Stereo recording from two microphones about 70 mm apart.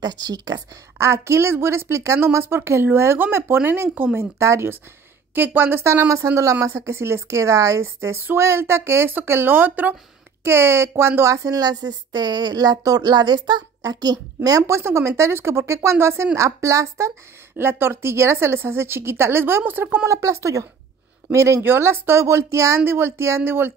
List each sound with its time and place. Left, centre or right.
0.0 s speech: right
0.9 s a woman's voice: right
4.2 s a woman's voice: right
5.3 s a woman's voice: right
8.2 s a woman's voice: right
10.4 s speech: right
14.6 s a woman's voice: right
17.6 s a woman's voice: right
20.1 s a woman's voice: right
21.6 s a woman's voice: right
22.8 s a woman's voice: right